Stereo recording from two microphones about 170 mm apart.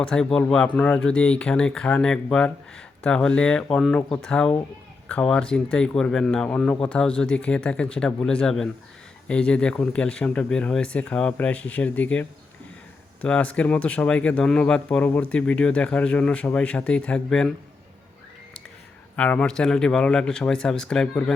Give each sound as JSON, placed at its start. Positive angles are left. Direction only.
{"t": 0.1, "sound": "speech", "side_deg": 5}
{"t": 13.2, "sound": "speech", "side_deg": 5}
{"t": 19.1, "sound": "speech", "side_deg": 10}